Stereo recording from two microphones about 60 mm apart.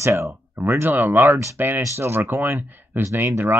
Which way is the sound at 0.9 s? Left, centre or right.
Right.